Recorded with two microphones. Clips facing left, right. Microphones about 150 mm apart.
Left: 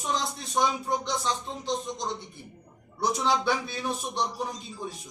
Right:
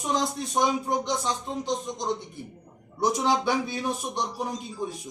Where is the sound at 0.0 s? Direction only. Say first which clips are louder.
Right 4 dB; 15° right (ahead or behind).